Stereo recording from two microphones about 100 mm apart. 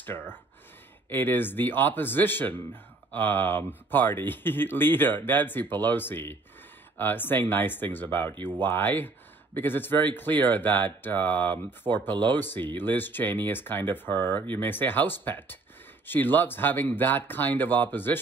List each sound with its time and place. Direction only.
0.0 s speech: 20° left (ahead or behind)